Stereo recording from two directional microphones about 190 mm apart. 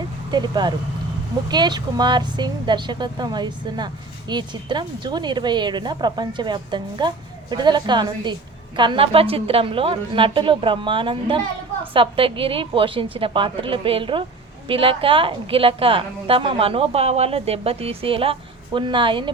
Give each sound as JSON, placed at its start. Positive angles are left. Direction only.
{"t": 0.3, "sound": "speech", "side_deg": -20}